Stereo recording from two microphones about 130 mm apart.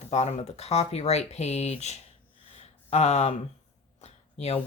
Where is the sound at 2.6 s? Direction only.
55° left (ahead or behind).